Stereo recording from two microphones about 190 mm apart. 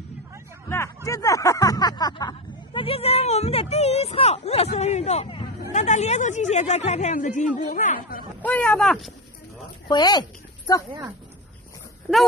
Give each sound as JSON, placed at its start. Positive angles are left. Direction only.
{"t": 0.7, "sound": "speech", "side_deg": 15}
{"t": 8.4, "sound": "speech", "side_deg": 10}
{"t": 9.8, "sound": "speech", "side_deg": 20}